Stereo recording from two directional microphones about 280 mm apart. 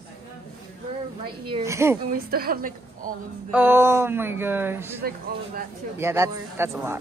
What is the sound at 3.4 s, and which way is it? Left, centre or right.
Speech, centre.